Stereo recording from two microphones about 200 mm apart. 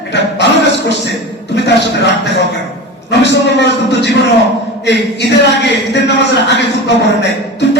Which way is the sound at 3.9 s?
60° left (ahead or behind).